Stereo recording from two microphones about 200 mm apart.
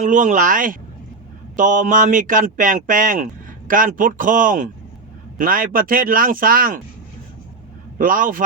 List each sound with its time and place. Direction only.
0.0 s speech: 40° right (ahead or behind)
7.9 s speech: 45° right (ahead or behind)